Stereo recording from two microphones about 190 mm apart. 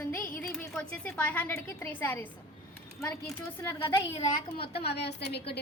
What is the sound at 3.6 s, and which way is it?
Speech, 15° left (ahead or behind).